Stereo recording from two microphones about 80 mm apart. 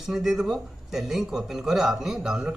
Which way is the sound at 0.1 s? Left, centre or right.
Centre.